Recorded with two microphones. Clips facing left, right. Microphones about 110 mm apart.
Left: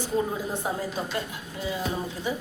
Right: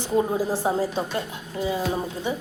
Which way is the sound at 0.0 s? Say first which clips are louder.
Right 5 dB; 30° right (ahead or behind).